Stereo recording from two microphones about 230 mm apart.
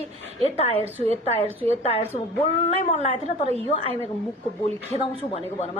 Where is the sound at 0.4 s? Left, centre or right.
Left.